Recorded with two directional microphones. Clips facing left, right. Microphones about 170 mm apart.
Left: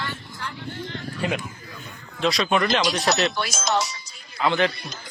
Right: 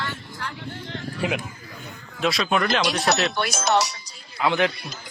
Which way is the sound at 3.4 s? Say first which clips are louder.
Right 3 dB; 60° right (ahead or behind).